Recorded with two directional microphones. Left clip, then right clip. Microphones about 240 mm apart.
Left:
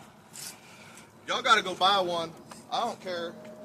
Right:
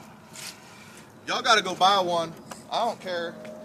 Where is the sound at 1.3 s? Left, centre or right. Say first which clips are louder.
Right 2 dB; right.